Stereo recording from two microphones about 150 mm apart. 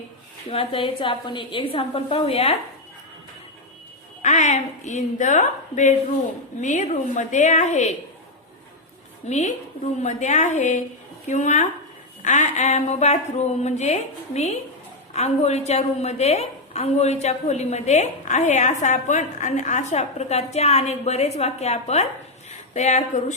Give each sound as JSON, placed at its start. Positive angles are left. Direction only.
{"t": 0.5, "sound": "a woman's voice", "side_deg": 40}
{"t": 4.2, "sound": "a woman's voice", "side_deg": 50}
{"t": 9.2, "sound": "a woman's voice", "side_deg": 50}
{"t": 22.4, "sound": "a sound", "side_deg": 50}